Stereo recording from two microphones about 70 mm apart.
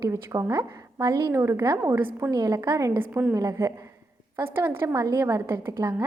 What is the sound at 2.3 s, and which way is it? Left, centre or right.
Speech, right.